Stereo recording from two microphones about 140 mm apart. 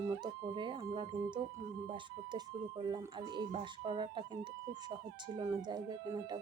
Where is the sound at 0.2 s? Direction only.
35° right (ahead or behind).